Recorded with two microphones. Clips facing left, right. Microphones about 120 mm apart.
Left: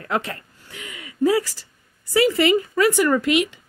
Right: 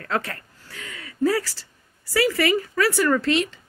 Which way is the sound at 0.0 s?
15° left (ahead or behind).